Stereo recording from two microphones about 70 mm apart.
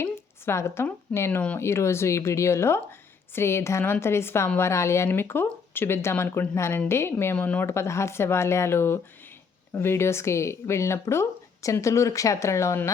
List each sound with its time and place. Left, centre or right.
0.0 s a sound: left
1.1 s speech: left
5.0 s speech: left
7.3 s speech: left
7.7 s speech: left